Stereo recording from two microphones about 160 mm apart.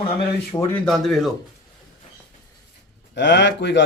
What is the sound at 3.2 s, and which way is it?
Speech, 90° left.